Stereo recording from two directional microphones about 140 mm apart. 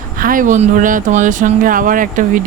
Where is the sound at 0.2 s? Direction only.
80° right.